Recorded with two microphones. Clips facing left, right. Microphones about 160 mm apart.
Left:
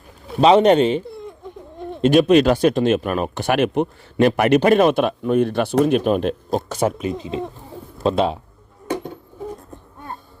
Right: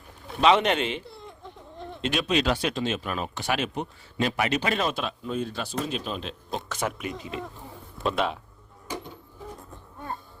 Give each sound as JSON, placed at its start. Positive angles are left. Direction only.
{"t": 0.3, "sound": "speech", "side_deg": 35}
{"t": 6.5, "sound": "speech", "side_deg": 40}